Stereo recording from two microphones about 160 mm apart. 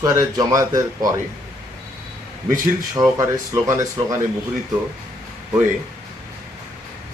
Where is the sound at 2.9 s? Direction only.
25° right (ahead or behind).